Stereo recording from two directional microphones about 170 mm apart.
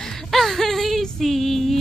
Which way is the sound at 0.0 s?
5° left (ahead or behind).